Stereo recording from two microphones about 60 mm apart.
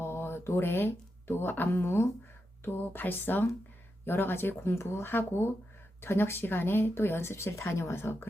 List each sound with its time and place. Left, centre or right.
0.0 s speech: left